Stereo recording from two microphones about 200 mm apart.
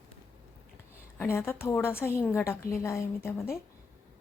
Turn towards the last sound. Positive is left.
turn(degrees=15)  # may be behind; listen again after turning